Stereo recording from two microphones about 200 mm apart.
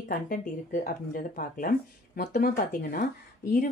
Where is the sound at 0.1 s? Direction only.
45° left (ahead or behind).